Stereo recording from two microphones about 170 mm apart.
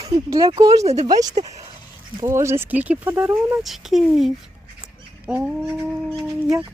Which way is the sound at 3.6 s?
Centre (ahead or behind).